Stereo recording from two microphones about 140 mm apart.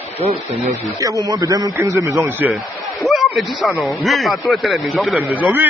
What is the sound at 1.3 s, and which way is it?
Speech, 25° right (ahead or behind).